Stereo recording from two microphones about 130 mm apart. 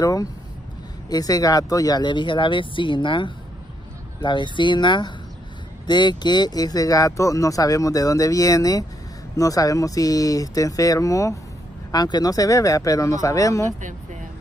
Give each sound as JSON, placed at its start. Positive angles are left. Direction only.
{"t": 0.0, "sound": "speech", "side_deg": 30}